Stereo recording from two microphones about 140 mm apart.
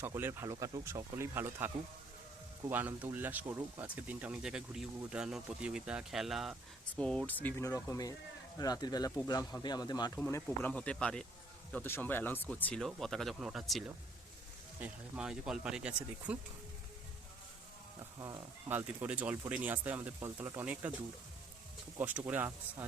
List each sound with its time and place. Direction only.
0.0 s speech: 15° right (ahead or behind); by 7.3 s 5° left (ahead or behind)
7.4 s speech: 20° left (ahead or behind)
10.7 s speech: 5° left (ahead or behind)
18.7 s speech: 15° right (ahead or behind)
21.9 s speech: 10° right (ahead or behind)